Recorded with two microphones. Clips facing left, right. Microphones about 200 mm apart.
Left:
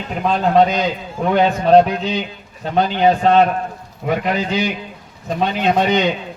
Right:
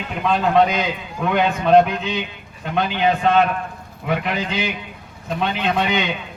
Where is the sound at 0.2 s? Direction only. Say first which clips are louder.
Left 2 dB; 40° left (ahead or behind).